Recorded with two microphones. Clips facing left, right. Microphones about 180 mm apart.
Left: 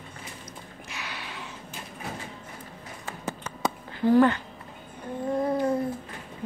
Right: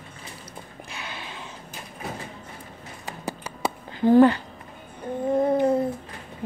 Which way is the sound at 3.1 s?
15° right (ahead or behind).